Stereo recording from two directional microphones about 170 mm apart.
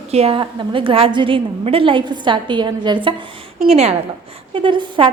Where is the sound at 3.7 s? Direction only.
35° right (ahead or behind).